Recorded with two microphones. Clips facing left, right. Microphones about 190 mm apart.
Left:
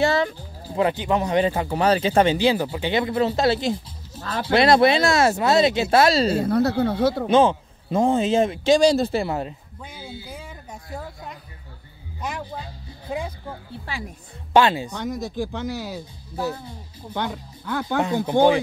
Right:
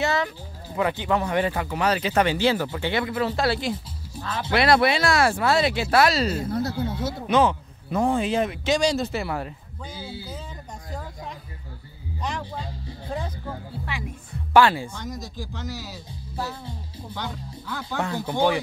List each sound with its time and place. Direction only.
0.0 s music: 30° left (ahead or behind)
0.7 s speech: 20° left (ahead or behind)
2.3 s speech: 15° left (ahead or behind)
6.4 s speech: 65° left (ahead or behind)
7.2 s speech: 25° left (ahead or behind)
9.8 s speech: 10° left (ahead or behind)
12.2 s speech: 5° left (ahead or behind)
14.5 s speech: 20° left (ahead or behind)
14.9 s speech: 60° left (ahead or behind)
17.1 s speech: 60° left (ahead or behind)
18.2 s speech: 20° left (ahead or behind)